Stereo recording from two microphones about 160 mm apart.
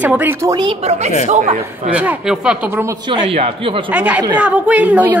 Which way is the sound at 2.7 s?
15° right (ahead or behind).